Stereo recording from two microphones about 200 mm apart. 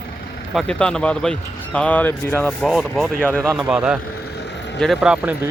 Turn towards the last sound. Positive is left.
turn(degrees=-5)  # may be behind; listen again after turning